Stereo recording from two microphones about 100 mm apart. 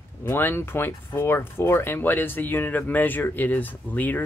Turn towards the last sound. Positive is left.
turn(degrees=15)  # may be behind; listen again after turning